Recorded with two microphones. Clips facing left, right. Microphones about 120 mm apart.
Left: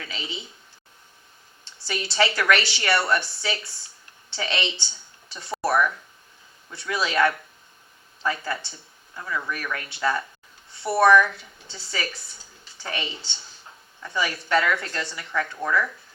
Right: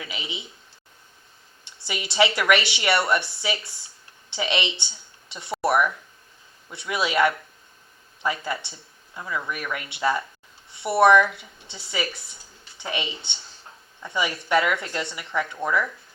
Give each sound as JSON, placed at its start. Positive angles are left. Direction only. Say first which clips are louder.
{"t": 0.0, "sound": "speech", "louder": "even", "side_deg": -20}
{"t": 1.6, "sound": "a woman's voice", "louder": "left 1 dB", "side_deg": -20}